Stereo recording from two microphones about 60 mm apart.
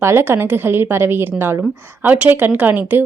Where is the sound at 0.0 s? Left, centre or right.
Right.